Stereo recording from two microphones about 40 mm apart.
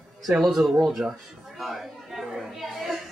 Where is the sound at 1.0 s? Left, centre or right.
Right.